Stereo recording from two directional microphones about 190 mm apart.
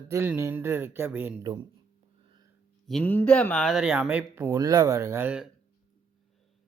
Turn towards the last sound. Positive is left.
turn(degrees=-5)  # may be behind; listen again after turning